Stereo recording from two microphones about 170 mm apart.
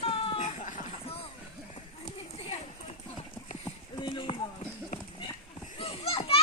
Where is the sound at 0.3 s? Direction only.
40° left (ahead or behind).